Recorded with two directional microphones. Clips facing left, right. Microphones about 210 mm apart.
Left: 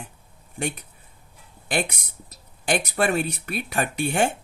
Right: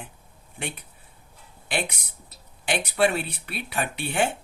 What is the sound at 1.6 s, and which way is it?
Speech, 45° left (ahead or behind).